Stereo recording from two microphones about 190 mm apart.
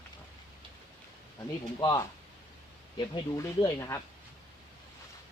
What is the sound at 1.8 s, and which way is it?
Speech, 20° left (ahead or behind).